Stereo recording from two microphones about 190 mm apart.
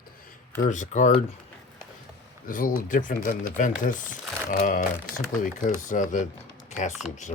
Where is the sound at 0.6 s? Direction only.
40° left (ahead or behind).